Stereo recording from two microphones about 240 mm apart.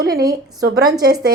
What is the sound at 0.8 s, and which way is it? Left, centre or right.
Speech, centre.